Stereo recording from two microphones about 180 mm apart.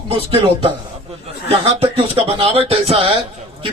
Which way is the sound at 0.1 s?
30° right (ahead or behind).